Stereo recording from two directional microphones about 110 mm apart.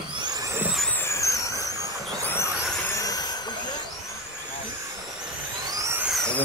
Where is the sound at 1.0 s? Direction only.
30° left (ahead or behind).